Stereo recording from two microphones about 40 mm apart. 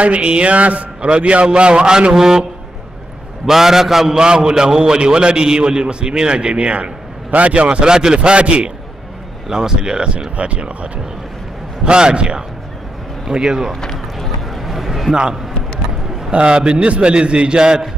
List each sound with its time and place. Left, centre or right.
0.0 s a man's voice: right; by 2.4 s centre
3.4 s a man's voice: centre
4.2 s a man's voice: centre
14.1 s a sound: centre
16.3 s a man's voice: right